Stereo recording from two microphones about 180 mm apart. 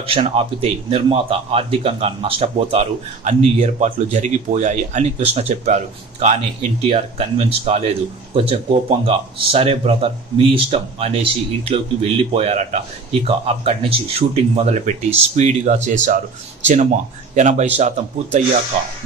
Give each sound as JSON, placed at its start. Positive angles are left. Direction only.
{"t": 0.0, "sound": "speech", "side_deg": -30}